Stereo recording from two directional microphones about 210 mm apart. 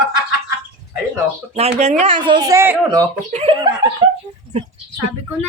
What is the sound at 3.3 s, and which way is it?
Speech, 30° right (ahead or behind).